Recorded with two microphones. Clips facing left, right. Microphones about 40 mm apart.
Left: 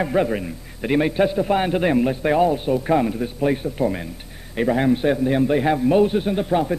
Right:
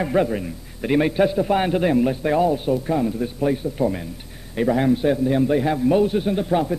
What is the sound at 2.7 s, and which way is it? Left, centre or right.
Speech, left.